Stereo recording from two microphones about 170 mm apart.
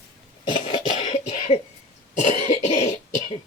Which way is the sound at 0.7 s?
40° left (ahead or behind).